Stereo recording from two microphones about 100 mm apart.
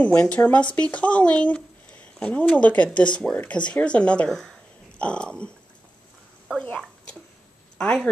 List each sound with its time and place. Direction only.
0.0 s speech: 10° left (ahead or behind)
7.7 s a woman's voice: 10° left (ahead or behind)